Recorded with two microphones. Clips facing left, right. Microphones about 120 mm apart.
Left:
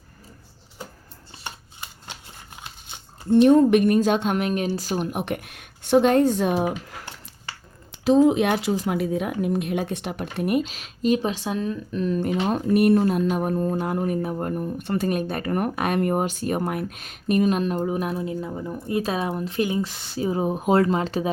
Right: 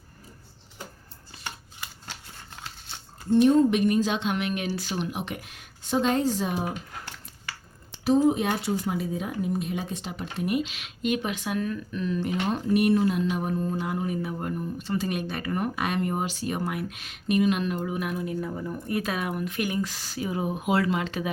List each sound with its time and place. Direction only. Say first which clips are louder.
1.5 s scissors: left 1 dB; 20° left (ahead or behind)
2.6 s a sound: right 1 dB; 15° left (ahead or behind)
3.4 s speech: left 5 dB; 60° left (ahead or behind); by 5.2 s 40° left (ahead or behind)
5.2 s speech: left 6 dB; 55° left (ahead or behind)
8.1 s speech: left 5 dB; 85° left; by 11.9 s 25° left (ahead or behind)
11.9 s speech: left 5 dB; 40° left (ahead or behind)